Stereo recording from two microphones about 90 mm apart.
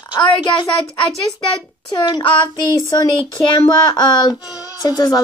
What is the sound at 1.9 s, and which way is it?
Child singing, 55° left (ahead or behind).